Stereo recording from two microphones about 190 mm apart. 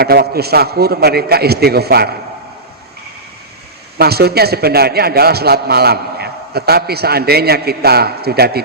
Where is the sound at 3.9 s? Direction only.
55° right (ahead or behind).